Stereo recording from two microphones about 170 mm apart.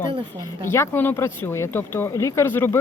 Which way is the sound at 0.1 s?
30° right (ahead or behind).